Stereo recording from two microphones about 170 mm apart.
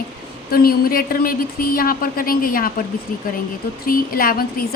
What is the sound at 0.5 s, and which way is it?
A woman's voice, 60° left (ahead or behind).